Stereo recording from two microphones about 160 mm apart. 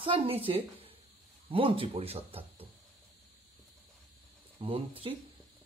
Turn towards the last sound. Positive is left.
turn(degrees=-35)  # may be behind; listen again after turning